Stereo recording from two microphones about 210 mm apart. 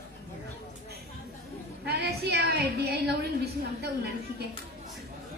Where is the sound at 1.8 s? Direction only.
50° right (ahead or behind).